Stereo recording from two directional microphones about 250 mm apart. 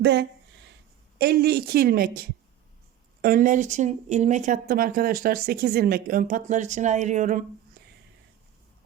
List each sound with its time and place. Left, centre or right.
0.0 s speech: right